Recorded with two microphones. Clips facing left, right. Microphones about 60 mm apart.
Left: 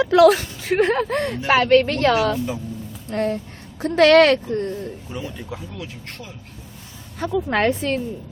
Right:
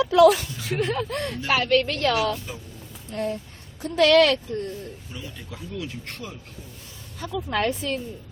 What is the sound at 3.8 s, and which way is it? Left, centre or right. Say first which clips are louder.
Speech: left 5 dB; left.